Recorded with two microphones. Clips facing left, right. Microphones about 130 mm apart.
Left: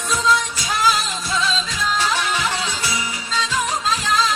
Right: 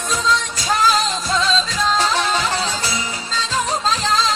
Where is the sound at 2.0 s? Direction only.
45° right (ahead or behind).